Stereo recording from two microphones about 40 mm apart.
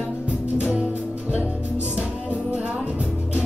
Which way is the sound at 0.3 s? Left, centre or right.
Right.